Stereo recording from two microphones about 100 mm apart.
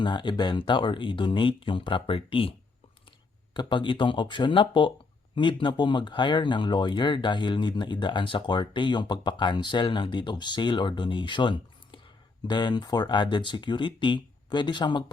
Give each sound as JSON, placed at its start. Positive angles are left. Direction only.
{"t": 0.0, "sound": "speech", "side_deg": 50}
{"t": 3.5, "sound": "speech", "side_deg": 50}